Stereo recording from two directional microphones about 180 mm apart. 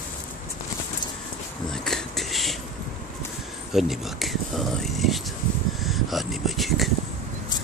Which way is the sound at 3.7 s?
Centre (ahead or behind).